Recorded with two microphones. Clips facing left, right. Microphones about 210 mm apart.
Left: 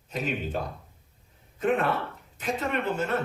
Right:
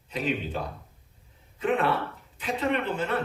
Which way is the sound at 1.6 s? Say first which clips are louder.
Even; 45° left (ahead or behind).